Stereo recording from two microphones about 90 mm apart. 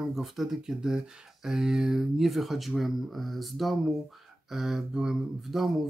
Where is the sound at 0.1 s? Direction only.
Centre (ahead or behind).